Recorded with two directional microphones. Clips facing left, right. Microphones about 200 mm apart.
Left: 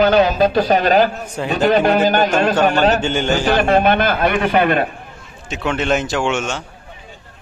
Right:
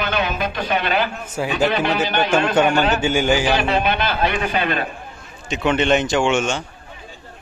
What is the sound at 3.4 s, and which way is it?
A man's voice, 50° left (ahead or behind).